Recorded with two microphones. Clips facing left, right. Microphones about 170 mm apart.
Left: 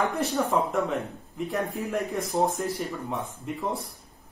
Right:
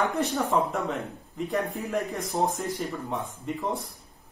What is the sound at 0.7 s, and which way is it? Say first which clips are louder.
Speech: left 3 dB; centre (ahead or behind).